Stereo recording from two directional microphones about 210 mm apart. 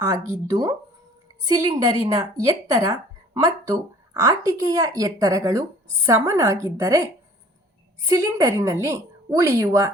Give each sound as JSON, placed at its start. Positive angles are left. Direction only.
{"t": 0.0, "sound": "speech", "side_deg": -15}